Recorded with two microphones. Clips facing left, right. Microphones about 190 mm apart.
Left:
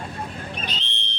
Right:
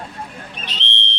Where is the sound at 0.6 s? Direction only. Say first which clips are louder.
Right 1 dB; 75° right (ahead or behind).